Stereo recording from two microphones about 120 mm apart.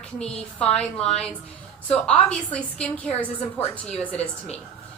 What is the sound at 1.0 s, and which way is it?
Speech, 60° left (ahead or behind).